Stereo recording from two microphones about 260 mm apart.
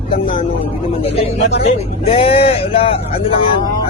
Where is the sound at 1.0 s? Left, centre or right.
Left.